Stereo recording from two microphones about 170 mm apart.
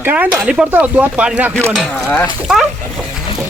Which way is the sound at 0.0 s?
10° right (ahead or behind).